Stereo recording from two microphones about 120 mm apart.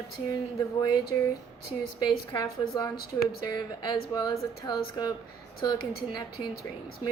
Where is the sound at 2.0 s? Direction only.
30° left (ahead or behind).